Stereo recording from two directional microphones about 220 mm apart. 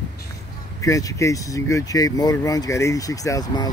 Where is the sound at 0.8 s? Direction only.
15° left (ahead or behind).